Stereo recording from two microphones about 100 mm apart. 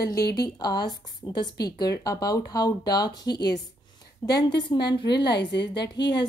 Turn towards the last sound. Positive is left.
turn(degrees=45)  # may be behind; listen again after turning